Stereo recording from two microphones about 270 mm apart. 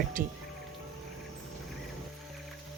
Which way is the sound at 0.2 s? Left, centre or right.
Right.